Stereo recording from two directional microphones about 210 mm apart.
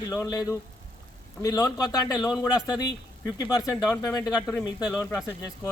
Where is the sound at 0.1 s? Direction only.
15° left (ahead or behind).